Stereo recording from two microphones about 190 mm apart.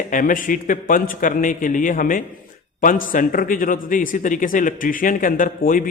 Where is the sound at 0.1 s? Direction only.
45° left (ahead or behind).